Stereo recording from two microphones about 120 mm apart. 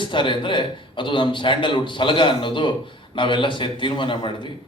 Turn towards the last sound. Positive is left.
turn(degrees=40)  # may be behind; listen again after turning